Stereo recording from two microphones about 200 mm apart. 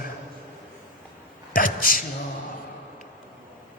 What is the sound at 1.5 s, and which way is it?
Speech, 45° left (ahead or behind).